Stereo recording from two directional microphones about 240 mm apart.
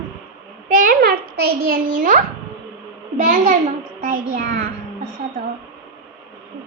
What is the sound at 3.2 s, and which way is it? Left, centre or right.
A child's voice, right.